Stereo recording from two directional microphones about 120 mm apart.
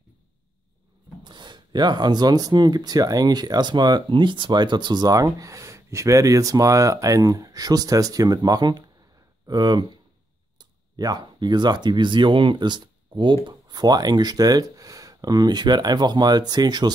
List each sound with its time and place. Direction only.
1.2 s speech: 40° right (ahead or behind)